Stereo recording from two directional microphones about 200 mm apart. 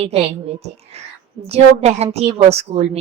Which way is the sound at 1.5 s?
30° right (ahead or behind).